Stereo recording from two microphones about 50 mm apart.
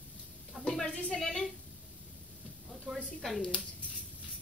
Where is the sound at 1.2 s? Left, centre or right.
Centre.